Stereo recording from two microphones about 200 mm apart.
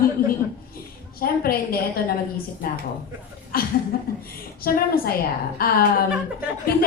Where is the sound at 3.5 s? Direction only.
50° left (ahead or behind).